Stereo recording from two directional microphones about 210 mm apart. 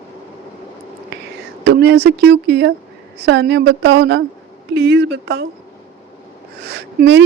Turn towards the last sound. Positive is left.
turn(degrees=-50)  # may be behind; listen again after turning